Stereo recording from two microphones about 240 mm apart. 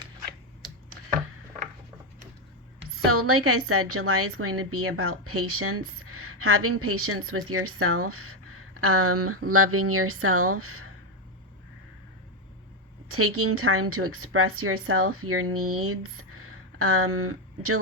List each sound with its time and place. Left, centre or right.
2.9 s a woman's voice: right
13.1 s a woman's voice: right